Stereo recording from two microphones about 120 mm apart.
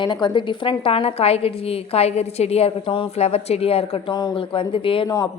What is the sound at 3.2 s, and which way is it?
A woman's voice, 60° left (ahead or behind).